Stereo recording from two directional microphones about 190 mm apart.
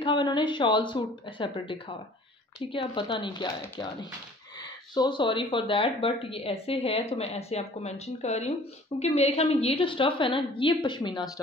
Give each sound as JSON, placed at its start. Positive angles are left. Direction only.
{"t": 0.0, "sound": "a woman's voice", "side_deg": 25}